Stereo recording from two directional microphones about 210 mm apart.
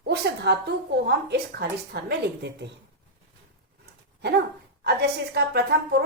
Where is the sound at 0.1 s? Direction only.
50° right (ahead or behind).